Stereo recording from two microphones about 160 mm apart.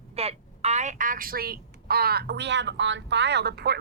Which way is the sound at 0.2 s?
40° right (ahead or behind).